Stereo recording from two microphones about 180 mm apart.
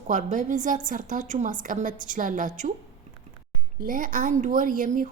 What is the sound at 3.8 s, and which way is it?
A woman's voice, 50° right (ahead or behind).